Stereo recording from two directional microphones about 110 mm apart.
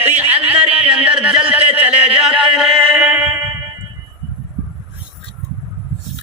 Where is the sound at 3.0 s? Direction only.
15° right (ahead or behind).